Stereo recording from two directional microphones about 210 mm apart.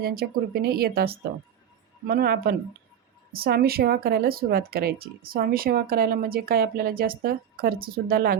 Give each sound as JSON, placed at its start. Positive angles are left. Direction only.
{"t": 0.0, "sound": "speech", "side_deg": -45}